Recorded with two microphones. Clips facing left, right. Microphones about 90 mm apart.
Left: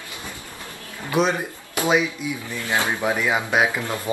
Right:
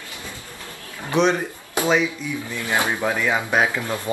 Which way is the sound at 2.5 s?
20° right (ahead or behind).